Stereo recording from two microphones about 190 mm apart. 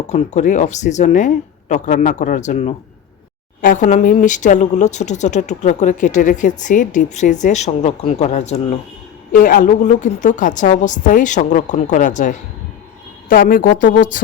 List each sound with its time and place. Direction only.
0.1 s speech: 40° left (ahead or behind)
9.3 s a woman's voice: 45° left (ahead or behind)